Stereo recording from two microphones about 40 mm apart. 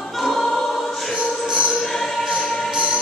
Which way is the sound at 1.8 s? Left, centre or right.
Centre.